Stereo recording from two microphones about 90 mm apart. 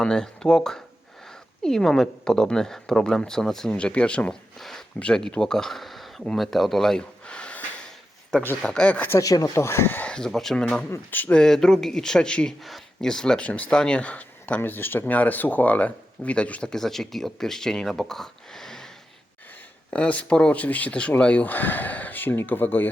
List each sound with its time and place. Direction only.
0.0 s speech: 10° left (ahead or behind)
4.9 s a sound: 10° left (ahead or behind)
8.6 s speech: 10° left (ahead or behind)
9.2 s speech: 40° left (ahead or behind); by 10.1 s 25° left (ahead or behind)
10.1 s speech: 10° left (ahead or behind)
10.9 s speech: 20° left (ahead or behind)
11.3 s speech: 5° left (ahead or behind)
19.9 s speech: 15° left (ahead or behind)